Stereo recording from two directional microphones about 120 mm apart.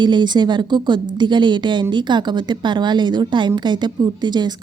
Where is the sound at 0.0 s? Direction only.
40° right (ahead or behind).